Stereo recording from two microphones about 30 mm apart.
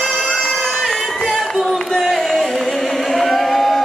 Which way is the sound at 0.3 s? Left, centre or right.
Centre.